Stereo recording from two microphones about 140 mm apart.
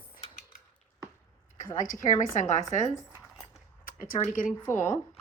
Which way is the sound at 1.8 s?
70° left (ahead or behind).